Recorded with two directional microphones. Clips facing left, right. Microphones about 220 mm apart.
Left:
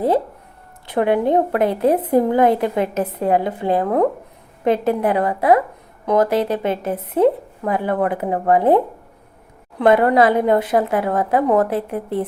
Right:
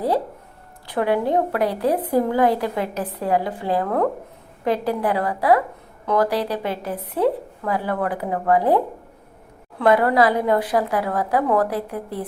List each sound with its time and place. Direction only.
0.9 s a woman's voice: 20° left (ahead or behind)